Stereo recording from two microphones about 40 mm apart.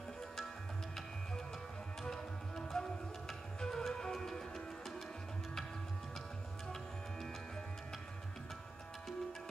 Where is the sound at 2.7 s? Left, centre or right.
Centre.